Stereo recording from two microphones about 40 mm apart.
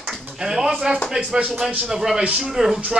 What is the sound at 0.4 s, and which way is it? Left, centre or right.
Speech, centre.